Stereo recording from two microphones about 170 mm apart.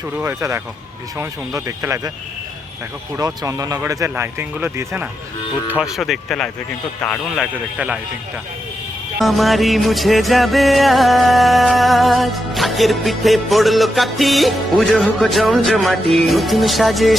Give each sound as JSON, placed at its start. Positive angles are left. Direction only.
{"t": 0.2, "sound": "speech", "side_deg": -15}
{"t": 3.2, "sound": "speech", "side_deg": -20}
{"t": 5.6, "sound": "music", "side_deg": -5}
{"t": 9.1, "sound": "music", "side_deg": 0}